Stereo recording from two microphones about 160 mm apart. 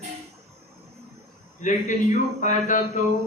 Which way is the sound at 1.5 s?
50° left (ahead or behind).